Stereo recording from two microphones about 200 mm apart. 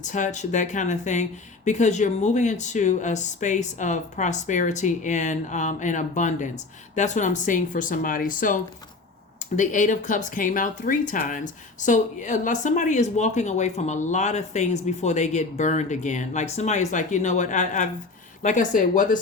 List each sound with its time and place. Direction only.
0.0 s speech: 40° left (ahead or behind)